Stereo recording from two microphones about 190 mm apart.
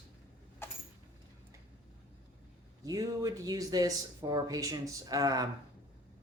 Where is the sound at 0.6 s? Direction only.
10° left (ahead or behind).